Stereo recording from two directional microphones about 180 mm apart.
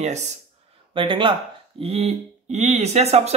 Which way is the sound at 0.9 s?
30° right (ahead or behind).